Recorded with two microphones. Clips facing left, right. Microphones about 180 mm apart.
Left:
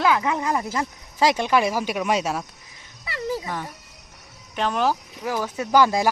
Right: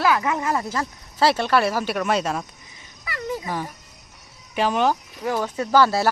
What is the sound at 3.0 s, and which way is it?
Music, 30° left (ahead or behind).